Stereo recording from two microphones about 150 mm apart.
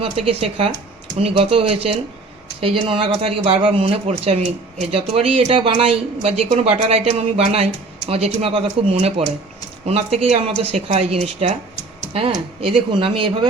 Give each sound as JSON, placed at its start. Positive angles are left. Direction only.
{"t": 0.0, "sound": "speech", "side_deg": -40}